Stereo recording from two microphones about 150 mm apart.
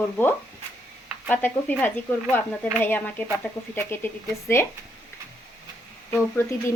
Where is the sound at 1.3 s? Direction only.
10° left (ahead or behind).